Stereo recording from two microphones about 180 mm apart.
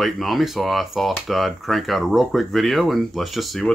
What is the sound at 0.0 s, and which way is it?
Speech, centre (ahead or behind).